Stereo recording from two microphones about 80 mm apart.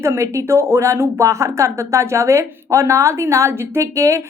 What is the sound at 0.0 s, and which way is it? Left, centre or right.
Speech, right.